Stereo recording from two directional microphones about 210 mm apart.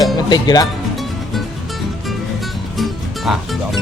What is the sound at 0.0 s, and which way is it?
Music, 20° left (ahead or behind).